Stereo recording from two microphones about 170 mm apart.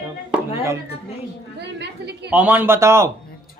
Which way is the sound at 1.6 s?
80° right.